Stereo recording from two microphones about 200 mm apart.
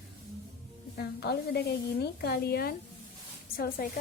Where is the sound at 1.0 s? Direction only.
55° left (ahead or behind).